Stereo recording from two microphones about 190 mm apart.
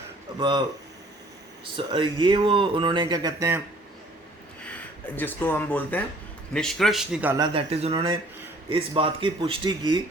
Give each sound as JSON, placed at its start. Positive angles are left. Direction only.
{"t": 0.3, "sound": "speech", "side_deg": -25}
{"t": 1.7, "sound": "speech", "side_deg": -25}
{"t": 4.6, "sound": "a man's voice", "side_deg": 10}
{"t": 7.3, "sound": "speech", "side_deg": -25}